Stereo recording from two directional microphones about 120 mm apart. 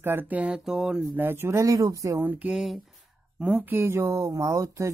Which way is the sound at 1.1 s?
20° right (ahead or behind).